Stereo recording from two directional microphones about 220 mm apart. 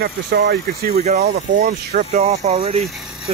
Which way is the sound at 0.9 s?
30° right (ahead or behind).